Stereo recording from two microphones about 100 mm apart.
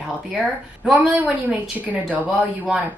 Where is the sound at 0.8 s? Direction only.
15° right (ahead or behind).